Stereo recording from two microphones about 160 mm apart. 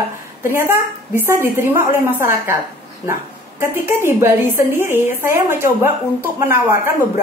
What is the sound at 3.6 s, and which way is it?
A woman's voice, 15° right (ahead or behind).